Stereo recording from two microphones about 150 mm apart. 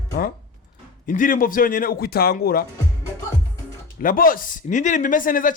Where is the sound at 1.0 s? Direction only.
65° left (ahead or behind); by 2.6 s 85° left.